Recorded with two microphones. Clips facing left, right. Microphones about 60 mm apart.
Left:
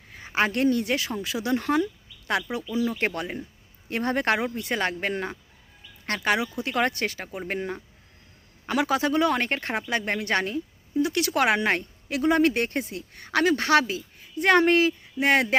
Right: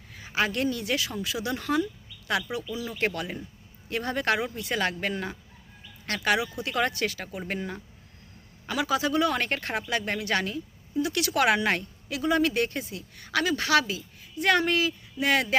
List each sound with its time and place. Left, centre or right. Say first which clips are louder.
0.1 s a woman's voice: left 3 dB; left
8.6 s speech: left 3 dB; left
12.0 s a woman's voice: left 4 dB; left